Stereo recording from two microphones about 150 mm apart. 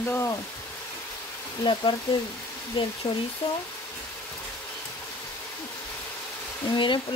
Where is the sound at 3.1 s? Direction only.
25° left (ahead or behind).